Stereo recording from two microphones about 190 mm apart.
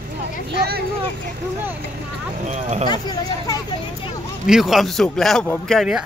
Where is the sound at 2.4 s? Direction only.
35° right (ahead or behind).